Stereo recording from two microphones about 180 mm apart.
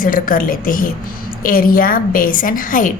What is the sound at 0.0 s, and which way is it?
A woman's voice, 50° left (ahead or behind).